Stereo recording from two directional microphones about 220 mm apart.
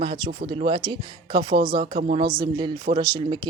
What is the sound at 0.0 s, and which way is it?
Speech, 25° right (ahead or behind).